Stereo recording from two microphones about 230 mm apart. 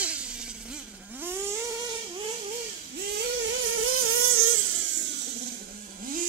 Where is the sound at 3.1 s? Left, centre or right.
Right.